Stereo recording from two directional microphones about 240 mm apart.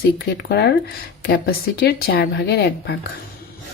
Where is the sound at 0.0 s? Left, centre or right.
Left.